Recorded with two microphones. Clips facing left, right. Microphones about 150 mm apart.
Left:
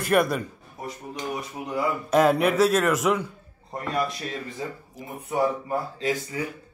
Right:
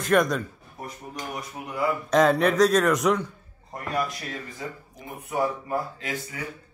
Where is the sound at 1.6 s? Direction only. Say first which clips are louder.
Left 3 dB; 20° left (ahead or behind).